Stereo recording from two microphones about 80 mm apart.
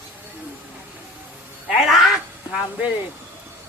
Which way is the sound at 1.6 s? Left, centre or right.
Centre.